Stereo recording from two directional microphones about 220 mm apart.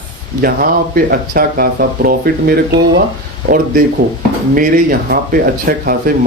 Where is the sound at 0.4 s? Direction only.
40° right (ahead or behind).